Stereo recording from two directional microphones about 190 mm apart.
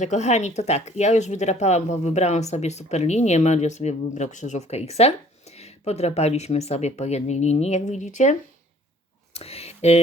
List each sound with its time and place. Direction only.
0.0 s speech: 35° left (ahead or behind)